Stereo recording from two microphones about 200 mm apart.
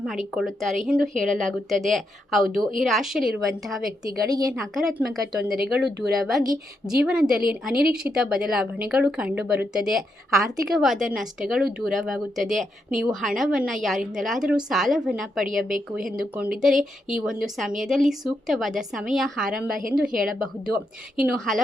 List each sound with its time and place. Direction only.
0.0 s speech: centre (ahead or behind)
4.0 s a woman's voice: 20° right (ahead or behind)
4.7 s speech: centre (ahead or behind)